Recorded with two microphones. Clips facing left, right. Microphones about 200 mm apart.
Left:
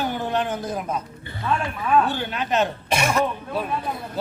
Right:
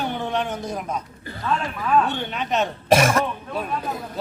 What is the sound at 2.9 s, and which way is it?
Speech, 45° right (ahead or behind).